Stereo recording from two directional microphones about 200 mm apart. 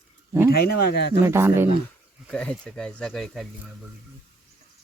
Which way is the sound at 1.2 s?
10° right (ahead or behind).